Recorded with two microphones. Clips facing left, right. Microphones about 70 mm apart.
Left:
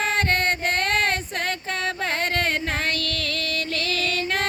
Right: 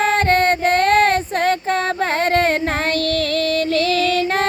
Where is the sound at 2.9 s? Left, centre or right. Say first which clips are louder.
Right 10 dB; right.